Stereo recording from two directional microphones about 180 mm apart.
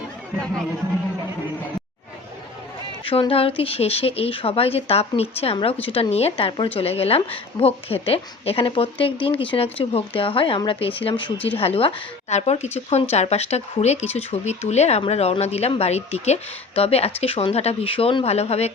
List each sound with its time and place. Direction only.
3.0 s a woman's voice: 30° left (ahead or behind)